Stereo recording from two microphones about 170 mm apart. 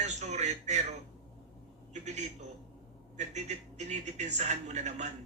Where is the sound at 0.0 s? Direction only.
40° right (ahead or behind).